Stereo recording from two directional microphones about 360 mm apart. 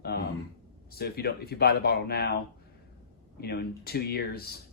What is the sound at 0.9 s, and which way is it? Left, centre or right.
Speech, left.